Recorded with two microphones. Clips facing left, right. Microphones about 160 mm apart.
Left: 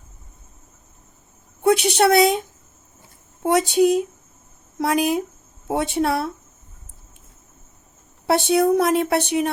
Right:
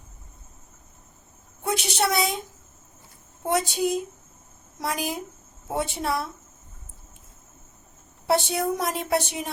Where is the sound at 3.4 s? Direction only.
70° left (ahead or behind).